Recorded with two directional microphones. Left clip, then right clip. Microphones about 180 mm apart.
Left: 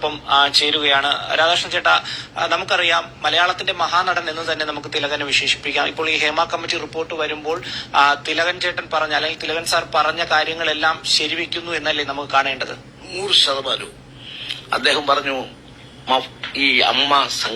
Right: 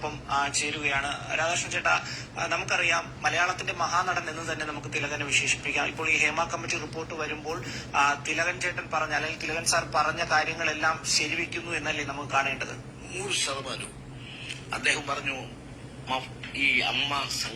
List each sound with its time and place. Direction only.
0.0 s a man's voice: 25° left (ahead or behind)